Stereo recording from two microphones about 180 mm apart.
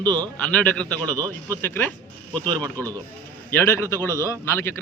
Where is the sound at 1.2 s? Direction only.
20° right (ahead or behind).